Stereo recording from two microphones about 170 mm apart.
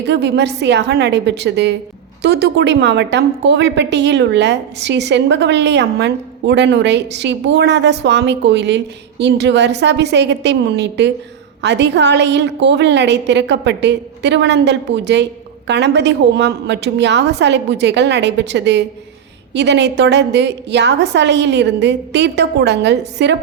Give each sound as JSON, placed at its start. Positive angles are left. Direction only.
{"t": 0.0, "sound": "a woman's voice", "side_deg": -85}